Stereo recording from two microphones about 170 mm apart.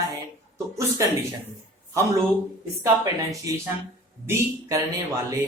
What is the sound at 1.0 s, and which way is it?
Speech, 20° right (ahead or behind).